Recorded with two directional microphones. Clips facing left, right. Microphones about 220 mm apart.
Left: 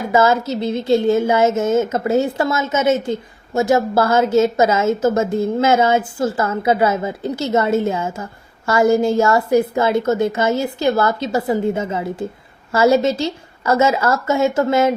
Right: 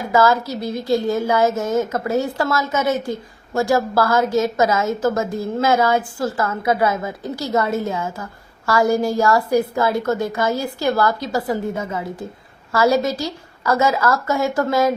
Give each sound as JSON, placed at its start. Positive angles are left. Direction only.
{"t": 0.1, "sound": "a woman's voice", "side_deg": 25}